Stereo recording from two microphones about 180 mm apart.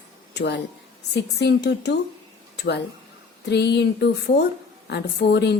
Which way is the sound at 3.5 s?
70° left (ahead or behind).